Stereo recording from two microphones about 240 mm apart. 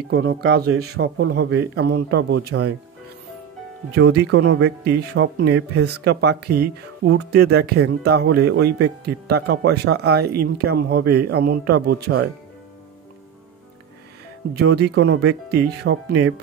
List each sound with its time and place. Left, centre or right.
0.1 s speech: right
3.9 s a man's voice: right
14.6 s speech: right